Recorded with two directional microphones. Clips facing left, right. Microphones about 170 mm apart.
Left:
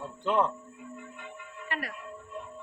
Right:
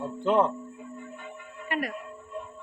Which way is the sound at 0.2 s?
25° right (ahead or behind).